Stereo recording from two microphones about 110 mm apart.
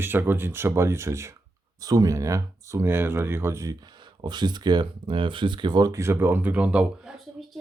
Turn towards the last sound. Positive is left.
turn(degrees=-5)  # may be behind; listen again after turning